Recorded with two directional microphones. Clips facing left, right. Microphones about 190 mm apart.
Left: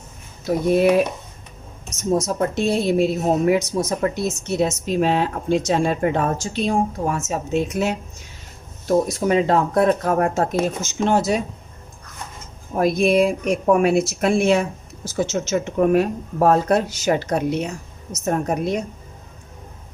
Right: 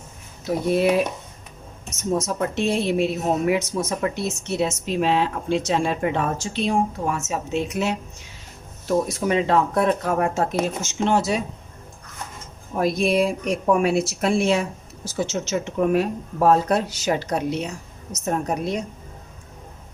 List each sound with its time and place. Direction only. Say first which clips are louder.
0.4 s a woman's voice: left 3 dB; 45° left (ahead or behind)
2.1 s a woman's voice: left 3 dB; 40° left (ahead or behind)
12.7 s a woman's voice: left 3 dB; 50° left (ahead or behind)